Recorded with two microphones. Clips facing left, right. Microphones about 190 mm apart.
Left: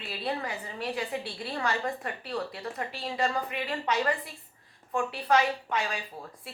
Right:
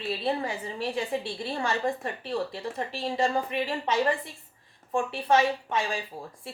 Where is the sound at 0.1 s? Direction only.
25° right (ahead or behind).